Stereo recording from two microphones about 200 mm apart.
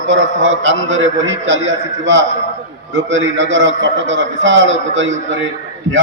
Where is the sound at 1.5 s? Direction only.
35° right (ahead or behind).